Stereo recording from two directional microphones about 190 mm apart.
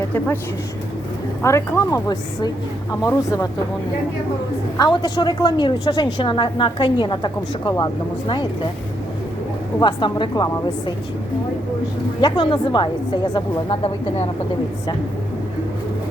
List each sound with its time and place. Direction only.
1.4 s a woman's voice: 15° left (ahead or behind)
4.8 s a woman's voice: 25° left (ahead or behind)
9.8 s a woman's voice: 25° left (ahead or behind)
12.2 s a woman's voice: 25° left (ahead or behind)